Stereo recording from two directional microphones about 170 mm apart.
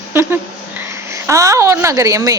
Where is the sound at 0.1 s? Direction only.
15° right (ahead or behind).